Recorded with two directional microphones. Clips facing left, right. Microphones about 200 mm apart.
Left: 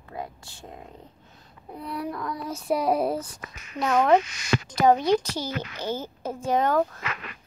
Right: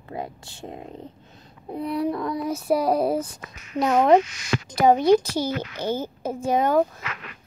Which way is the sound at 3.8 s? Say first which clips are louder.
Right 3 dB; 25° right (ahead or behind).